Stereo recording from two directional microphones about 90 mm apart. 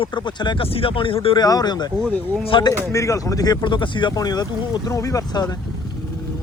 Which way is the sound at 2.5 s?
65° left (ahead or behind).